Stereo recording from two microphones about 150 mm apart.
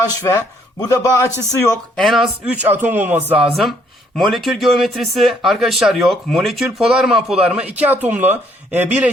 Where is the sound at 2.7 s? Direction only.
15° right (ahead or behind).